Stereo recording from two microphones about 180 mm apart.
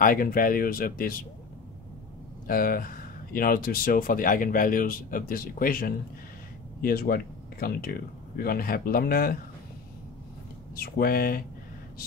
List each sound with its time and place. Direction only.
0.0 s speech: 50° left (ahead or behind)
2.4 s speech: 55° left (ahead or behind)
10.8 s speech: 55° left (ahead or behind)